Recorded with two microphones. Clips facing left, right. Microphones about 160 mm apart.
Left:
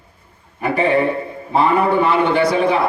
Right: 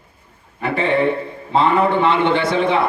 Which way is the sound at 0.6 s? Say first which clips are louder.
Left 1 dB; 25° right (ahead or behind).